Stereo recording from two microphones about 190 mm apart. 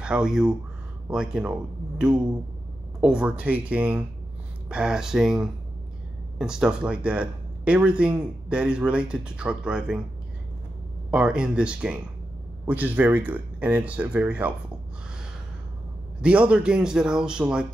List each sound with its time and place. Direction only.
0.0 s speech: 5° right (ahead or behind)
11.1 s speech: 5° right (ahead or behind)
16.2 s speech: 5° right (ahead or behind)